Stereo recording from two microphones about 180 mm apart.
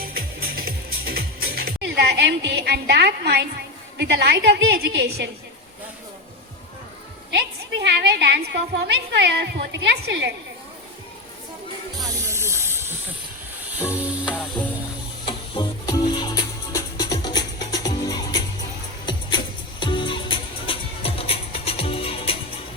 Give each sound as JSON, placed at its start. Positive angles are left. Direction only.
{"t": 0.0, "sound": "music", "side_deg": -55}
{"t": 3.9, "sound": "a woman's voice", "side_deg": -70}
{"t": 7.3, "sound": "a woman's voice", "side_deg": -75}
{"t": 11.9, "sound": "snake", "side_deg": -20}
{"t": 13.7, "sound": "music", "side_deg": -10}
{"t": 15.2, "sound": "music", "side_deg": 25}
{"t": 19.8, "sound": "music", "side_deg": 25}